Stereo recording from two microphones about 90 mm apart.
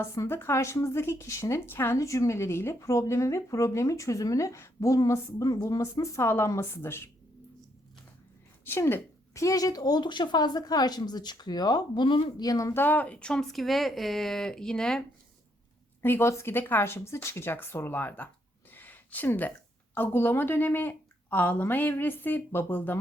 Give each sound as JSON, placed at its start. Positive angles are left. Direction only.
{"t": 0.3, "sound": "speech", "side_deg": 25}
{"t": 8.6, "sound": "a woman's voice", "side_deg": 25}
{"t": 9.3, "sound": "speech", "side_deg": 35}
{"t": 12.4, "sound": "speech", "side_deg": 40}
{"t": 12.7, "sound": "speech", "side_deg": 20}
{"t": 16.0, "sound": "a woman's voice", "side_deg": 25}